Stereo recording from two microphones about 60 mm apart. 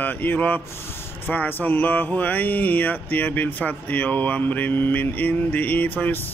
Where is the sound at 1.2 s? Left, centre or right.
Left.